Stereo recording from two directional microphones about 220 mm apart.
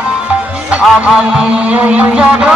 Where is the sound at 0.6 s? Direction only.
5° right (ahead or behind).